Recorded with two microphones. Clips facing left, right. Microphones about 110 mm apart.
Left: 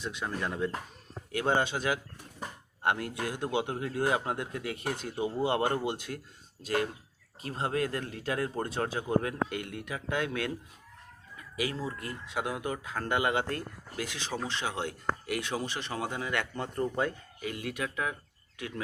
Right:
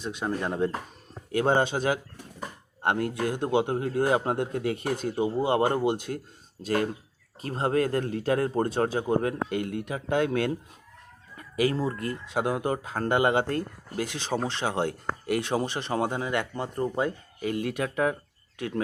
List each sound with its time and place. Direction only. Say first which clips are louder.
0.0 s a man's voice: right 5 dB; 20° right (ahead or behind)
7.4 s a man's voice: right 6 dB; 35° right (ahead or behind); by 17.1 s 20° right (ahead or behind)
17.4 s a man's voice: right 7 dB; 35° right (ahead or behind)